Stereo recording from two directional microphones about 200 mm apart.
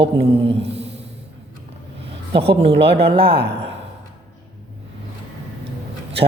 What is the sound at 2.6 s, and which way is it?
Speech, 30° right (ahead or behind).